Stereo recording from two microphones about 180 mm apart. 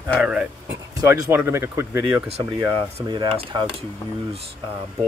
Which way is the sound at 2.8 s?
25° right (ahead or behind).